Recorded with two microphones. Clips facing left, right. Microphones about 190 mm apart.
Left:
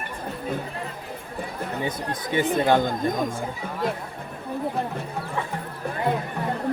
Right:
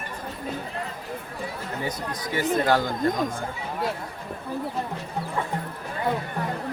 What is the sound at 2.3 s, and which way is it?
Speech, 20° left (ahead or behind).